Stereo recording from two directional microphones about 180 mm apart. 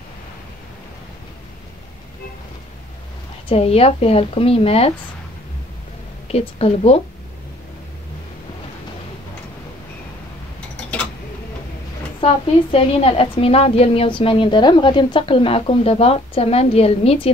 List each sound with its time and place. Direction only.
3.4 s a woman's voice: 35° left (ahead or behind)
6.2 s a woman's voice: 35° left (ahead or behind)
12.2 s a woman's voice: 30° left (ahead or behind)